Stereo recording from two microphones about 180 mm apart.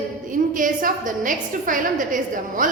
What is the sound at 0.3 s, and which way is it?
A woman's voice, 45° right (ahead or behind).